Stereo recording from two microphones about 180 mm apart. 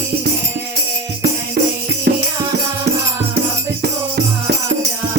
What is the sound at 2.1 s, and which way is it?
Music, 55° right (ahead or behind).